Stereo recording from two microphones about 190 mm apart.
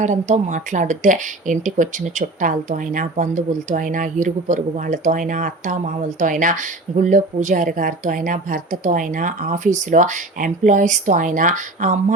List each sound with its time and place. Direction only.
0.0 s speech: 40° right (ahead or behind)